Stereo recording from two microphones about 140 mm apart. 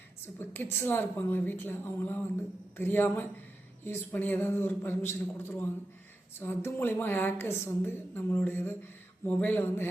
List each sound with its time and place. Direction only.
0.3 s a woman's voice: 15° left (ahead or behind)